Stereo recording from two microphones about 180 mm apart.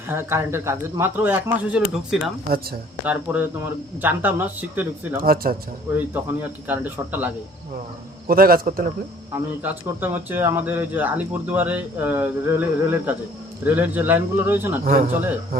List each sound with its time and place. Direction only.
0.1 s speech: 15° right (ahead or behind)
5.2 s a man's voice: 55° right (ahead or behind)
6.7 s speech: 10° right (ahead or behind)
8.3 s a man's voice: 55° right (ahead or behind)
9.3 s speech: 15° right (ahead or behind)
14.8 s a man's voice: 55° right (ahead or behind)